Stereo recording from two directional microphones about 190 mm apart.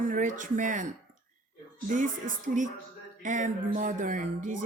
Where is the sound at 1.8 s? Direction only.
40° right (ahead or behind).